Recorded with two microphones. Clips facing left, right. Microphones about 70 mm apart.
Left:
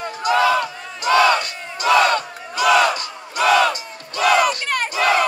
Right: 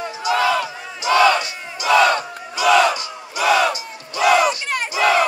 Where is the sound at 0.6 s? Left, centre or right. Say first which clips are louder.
Left 1 dB; left.